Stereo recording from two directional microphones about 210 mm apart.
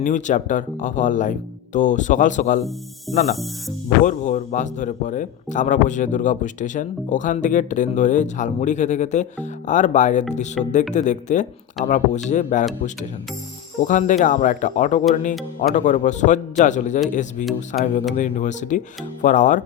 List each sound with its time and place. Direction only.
0.0 s speech: 35° left (ahead or behind)
13.8 s speech: 35° left (ahead or behind)